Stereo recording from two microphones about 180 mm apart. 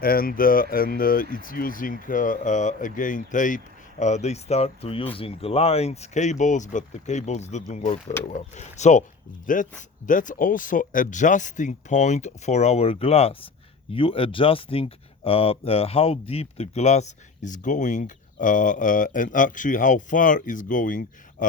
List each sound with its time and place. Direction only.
0.0 s speech: 55° left (ahead or behind)